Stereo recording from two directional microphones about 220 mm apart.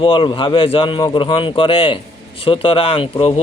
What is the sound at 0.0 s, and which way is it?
A man's voice, 25° left (ahead or behind).